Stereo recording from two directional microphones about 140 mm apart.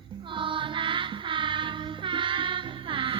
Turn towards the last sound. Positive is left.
turn(degrees=-35)  # may be behind; listen again after turning